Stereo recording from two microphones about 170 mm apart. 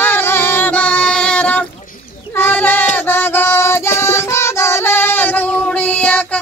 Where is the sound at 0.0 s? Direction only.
10° left (ahead or behind).